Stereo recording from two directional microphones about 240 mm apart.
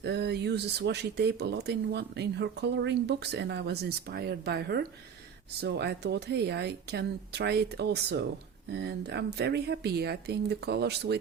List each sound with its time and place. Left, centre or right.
0.0 s speech: right